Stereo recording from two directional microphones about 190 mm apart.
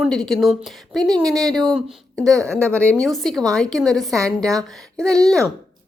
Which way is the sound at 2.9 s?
Centre (ahead or behind).